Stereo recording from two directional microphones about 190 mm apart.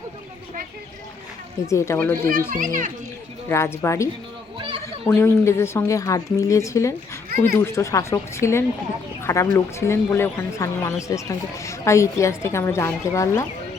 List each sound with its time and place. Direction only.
1.6 s speech: 15° left (ahead or behind)
2.5 s a child's voice: 45° right (ahead or behind)
3.5 s speech: 15° left (ahead or behind)
4.5 s a sound: 30° right (ahead or behind)
5.0 s speech: 15° left (ahead or behind)